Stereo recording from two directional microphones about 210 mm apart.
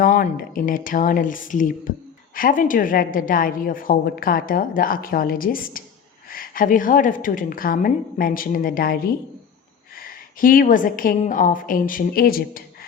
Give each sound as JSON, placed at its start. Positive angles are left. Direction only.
{"t": 0.0, "sound": "a woman's voice", "side_deg": 40}